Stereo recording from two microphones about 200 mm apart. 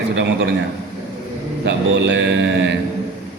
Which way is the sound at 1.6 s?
60° right (ahead or behind).